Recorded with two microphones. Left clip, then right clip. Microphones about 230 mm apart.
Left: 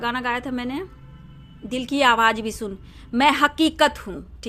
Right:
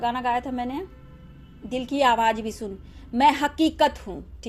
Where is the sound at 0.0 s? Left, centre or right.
Left.